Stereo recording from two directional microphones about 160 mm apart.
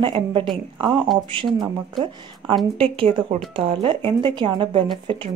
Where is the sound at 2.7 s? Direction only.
35° right (ahead or behind).